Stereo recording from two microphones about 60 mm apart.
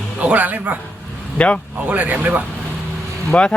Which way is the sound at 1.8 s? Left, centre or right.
Right.